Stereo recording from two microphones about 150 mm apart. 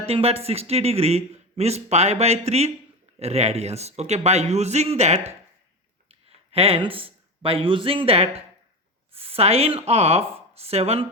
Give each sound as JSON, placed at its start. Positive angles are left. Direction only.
{"t": 0.0, "sound": "a man's voice", "side_deg": -40}